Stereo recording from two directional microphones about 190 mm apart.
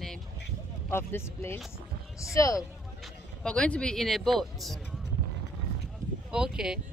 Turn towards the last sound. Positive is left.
turn(degrees=-5)  # may be behind; listen again after turning